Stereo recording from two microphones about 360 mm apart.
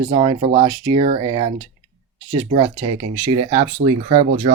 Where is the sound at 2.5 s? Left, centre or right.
Centre.